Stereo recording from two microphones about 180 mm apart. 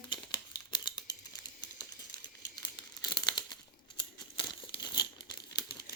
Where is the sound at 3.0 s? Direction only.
25° left (ahead or behind).